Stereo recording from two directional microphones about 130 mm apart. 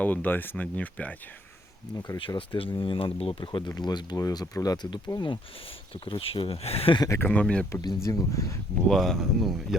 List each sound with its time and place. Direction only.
0.0 s speech: 15° left (ahead or behind)
2.1 s speech: 40° left (ahead or behind)
7.0 s speech: 25° left (ahead or behind)
7.3 s speech: 5° left (ahead or behind)
7.7 s speech: 30° left (ahead or behind)
8.9 s speech: centre (ahead or behind)